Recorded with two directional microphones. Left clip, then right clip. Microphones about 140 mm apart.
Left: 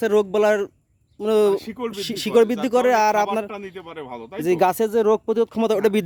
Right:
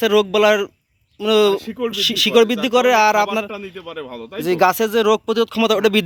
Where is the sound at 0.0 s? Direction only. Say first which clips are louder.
Right 4 dB; 25° left (ahead or behind).